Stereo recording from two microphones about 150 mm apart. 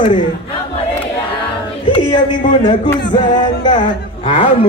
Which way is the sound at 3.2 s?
30° left (ahead or behind).